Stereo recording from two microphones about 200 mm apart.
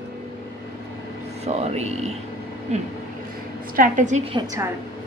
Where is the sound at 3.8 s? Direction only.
40° right (ahead or behind).